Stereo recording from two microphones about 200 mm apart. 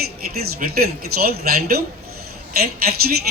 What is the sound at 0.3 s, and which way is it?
Speech, 50° right (ahead or behind).